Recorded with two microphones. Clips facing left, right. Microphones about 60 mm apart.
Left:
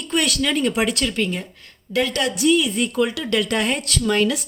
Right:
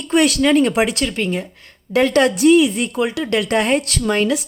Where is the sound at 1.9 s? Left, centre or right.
Right.